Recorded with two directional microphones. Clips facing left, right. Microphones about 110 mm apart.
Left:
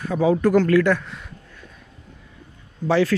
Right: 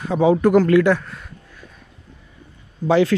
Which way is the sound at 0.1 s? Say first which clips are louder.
Right 3 dB; 20° right (ahead or behind).